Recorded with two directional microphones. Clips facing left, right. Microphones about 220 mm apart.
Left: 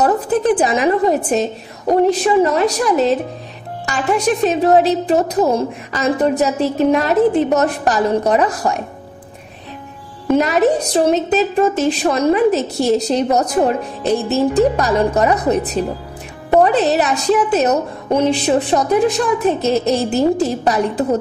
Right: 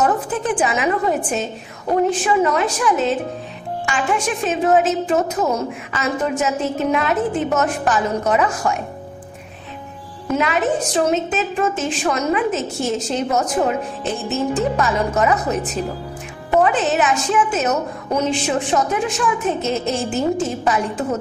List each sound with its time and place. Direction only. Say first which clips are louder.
0.0 s a woman's voice: left 5 dB; 40° left (ahead or behind)
10.3 s a woman's voice: left 5 dB; 40° left (ahead or behind)